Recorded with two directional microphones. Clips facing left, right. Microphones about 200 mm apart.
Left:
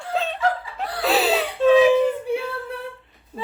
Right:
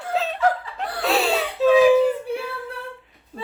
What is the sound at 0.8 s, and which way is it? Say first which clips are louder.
Whimper: left 1 dB; centre (ahead or behind).